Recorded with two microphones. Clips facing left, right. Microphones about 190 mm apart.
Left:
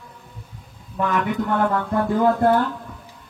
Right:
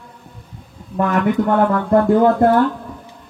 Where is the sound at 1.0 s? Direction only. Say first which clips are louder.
Right 6 dB; 50° right (ahead or behind).